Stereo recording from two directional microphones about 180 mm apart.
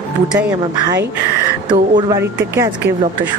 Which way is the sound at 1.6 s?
25° right (ahead or behind).